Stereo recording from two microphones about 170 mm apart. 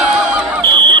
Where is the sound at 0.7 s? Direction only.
25° right (ahead or behind).